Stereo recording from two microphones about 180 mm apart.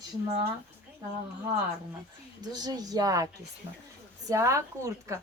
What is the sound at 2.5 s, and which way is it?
Speech, 20° right (ahead or behind).